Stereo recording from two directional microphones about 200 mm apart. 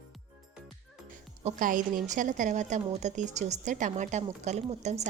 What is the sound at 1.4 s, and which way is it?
A woman's voice, 40° right (ahead or behind).